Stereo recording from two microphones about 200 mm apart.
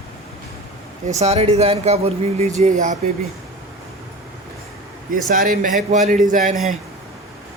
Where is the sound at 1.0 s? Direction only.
35° right (ahead or behind).